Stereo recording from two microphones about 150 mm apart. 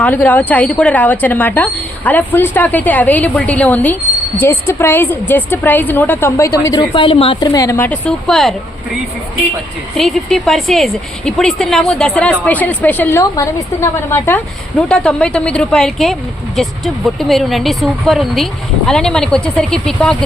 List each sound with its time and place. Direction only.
0.0 s a woman's voice: 10° left (ahead or behind)
6.9 s a woman's voice: 35° left (ahead or behind)
7.3 s a woman's voice: 25° left (ahead or behind)
7.9 s a woman's voice: 5° left (ahead or behind)
10.0 s a woman's voice: centre (ahead or behind)
14.8 s a woman's voice: 5° left (ahead or behind)